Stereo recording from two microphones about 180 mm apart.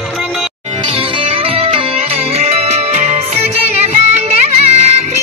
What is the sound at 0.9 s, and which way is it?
Music, 35° right (ahead or behind).